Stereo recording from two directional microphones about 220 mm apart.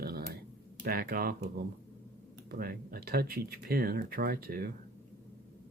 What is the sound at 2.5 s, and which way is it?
Speech, 40° right (ahead or behind).